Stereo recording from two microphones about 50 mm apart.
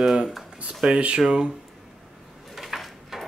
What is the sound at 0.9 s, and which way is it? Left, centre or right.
Speech, right.